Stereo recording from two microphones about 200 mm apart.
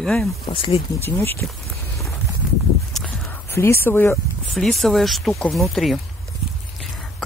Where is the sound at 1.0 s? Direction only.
10° left (ahead or behind).